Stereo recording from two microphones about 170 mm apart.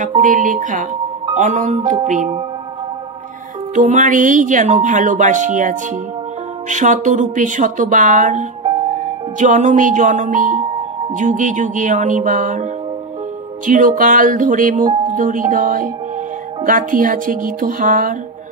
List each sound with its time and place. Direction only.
0.0 s speech: 50° right (ahead or behind)
3.7 s speech: 45° right (ahead or behind)
13.7 s speech: 50° right (ahead or behind)